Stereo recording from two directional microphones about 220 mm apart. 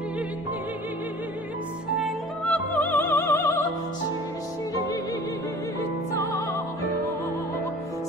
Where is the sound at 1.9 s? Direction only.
5° left (ahead or behind).